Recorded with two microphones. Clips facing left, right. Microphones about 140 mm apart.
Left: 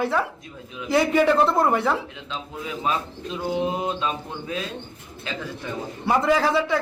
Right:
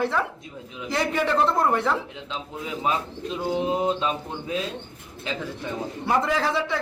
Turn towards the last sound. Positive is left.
turn(degrees=5)  # may be behind; listen again after turning